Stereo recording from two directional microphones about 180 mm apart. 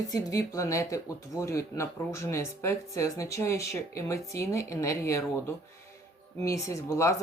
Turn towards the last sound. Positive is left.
turn(degrees=15)  # may be behind; listen again after turning